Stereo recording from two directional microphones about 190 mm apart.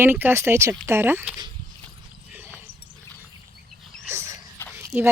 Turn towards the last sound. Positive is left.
turn(degrees=-10)  # may be behind; listen again after turning